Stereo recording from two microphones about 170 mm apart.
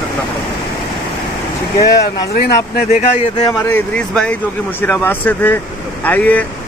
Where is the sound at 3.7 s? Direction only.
5° left (ahead or behind).